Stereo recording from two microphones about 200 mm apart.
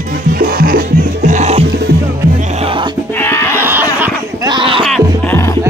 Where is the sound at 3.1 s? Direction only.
10° left (ahead or behind).